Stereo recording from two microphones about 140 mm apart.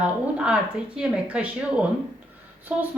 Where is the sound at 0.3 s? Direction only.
5° right (ahead or behind).